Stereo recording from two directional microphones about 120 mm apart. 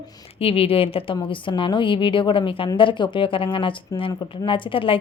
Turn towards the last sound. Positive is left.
turn(degrees=50)  # may be behind; listen again after turning